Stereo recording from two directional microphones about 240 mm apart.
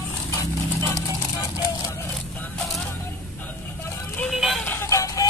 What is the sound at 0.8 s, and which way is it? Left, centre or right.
Vehicle, centre.